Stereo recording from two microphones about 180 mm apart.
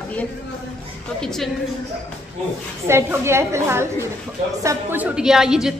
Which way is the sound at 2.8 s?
15° right (ahead or behind).